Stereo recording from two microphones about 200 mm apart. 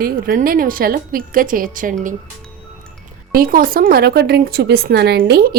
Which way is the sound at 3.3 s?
45° right (ahead or behind).